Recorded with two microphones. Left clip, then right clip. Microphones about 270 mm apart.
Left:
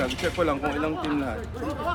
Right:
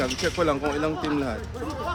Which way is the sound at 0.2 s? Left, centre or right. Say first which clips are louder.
Right 2 dB; right.